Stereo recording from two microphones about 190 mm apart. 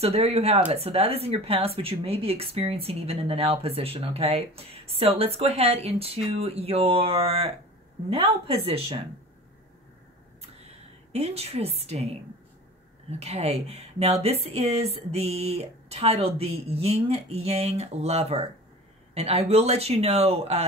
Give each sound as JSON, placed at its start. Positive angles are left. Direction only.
{"t": 0.0, "sound": "speech", "side_deg": -35}
{"t": 11.1, "sound": "speech", "side_deg": -35}
{"t": 13.2, "sound": "speech", "side_deg": -35}